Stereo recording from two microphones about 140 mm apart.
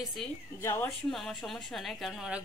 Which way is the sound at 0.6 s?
20° left (ahead or behind).